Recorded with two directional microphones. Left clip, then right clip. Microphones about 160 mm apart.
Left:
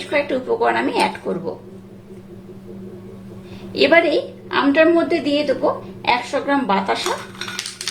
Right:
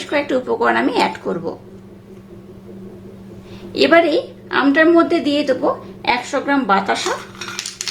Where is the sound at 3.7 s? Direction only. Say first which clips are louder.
Right 1 dB; 20° right (ahead or behind).